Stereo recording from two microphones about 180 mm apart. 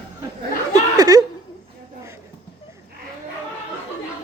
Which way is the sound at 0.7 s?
20° right (ahead or behind).